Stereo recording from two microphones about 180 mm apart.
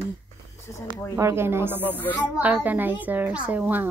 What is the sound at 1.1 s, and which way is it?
Speech, 15° right (ahead or behind).